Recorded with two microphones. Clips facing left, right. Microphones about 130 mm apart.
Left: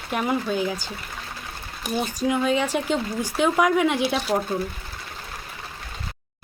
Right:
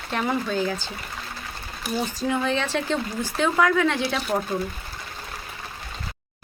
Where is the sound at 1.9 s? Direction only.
15° left (ahead or behind).